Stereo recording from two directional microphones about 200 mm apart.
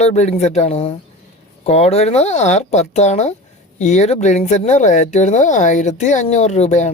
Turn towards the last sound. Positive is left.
turn(degrees=35)  # may be behind; listen again after turning